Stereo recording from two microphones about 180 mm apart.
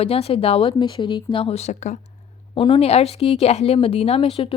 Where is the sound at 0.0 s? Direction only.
35° left (ahead or behind).